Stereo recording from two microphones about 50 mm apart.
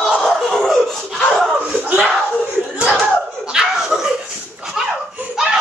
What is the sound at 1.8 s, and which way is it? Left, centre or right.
Slap, right.